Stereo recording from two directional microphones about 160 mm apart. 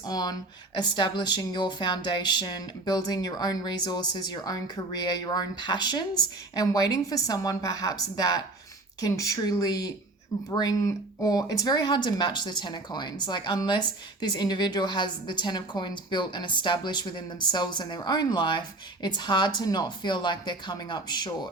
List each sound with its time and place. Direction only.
0.1 s speech: 25° left (ahead or behind)